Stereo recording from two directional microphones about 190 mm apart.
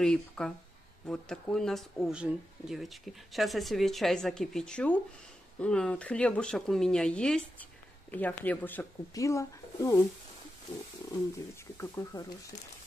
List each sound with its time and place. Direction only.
0.0 s speech: 5° left (ahead or behind)
11.3 s speech: 15° left (ahead or behind)